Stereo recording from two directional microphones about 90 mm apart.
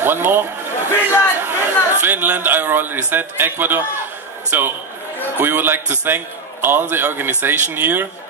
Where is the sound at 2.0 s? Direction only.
20° right (ahead or behind).